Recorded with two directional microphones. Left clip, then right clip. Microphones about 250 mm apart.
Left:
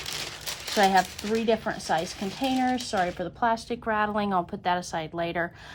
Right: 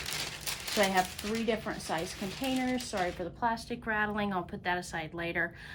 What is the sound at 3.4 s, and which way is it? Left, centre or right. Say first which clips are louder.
A woman's voice: left 7 dB; left.